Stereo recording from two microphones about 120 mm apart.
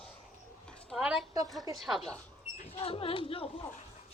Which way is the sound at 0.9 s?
5° right (ahead or behind).